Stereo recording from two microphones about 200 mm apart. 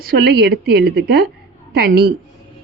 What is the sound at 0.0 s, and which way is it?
Speech, 50° right (ahead or behind).